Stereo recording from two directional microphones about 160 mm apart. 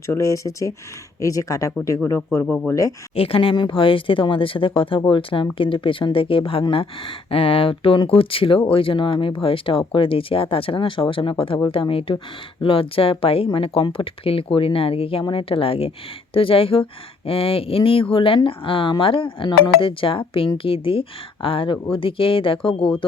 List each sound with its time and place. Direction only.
0.1 s speech: 20° left (ahead or behind)
3.2 s speech: 35° left (ahead or behind)